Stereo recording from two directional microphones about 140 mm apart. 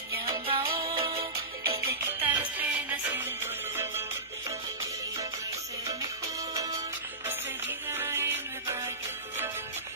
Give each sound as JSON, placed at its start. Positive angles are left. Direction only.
{"t": 0.2, "sound": "music", "side_deg": -40}
{"t": 2.0, "sound": "music", "side_deg": -15}
{"t": 5.9, "sound": "music", "side_deg": -25}